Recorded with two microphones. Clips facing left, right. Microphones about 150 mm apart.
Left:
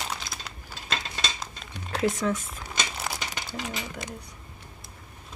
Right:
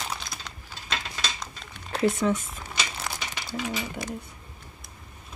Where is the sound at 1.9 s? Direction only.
Centre (ahead or behind).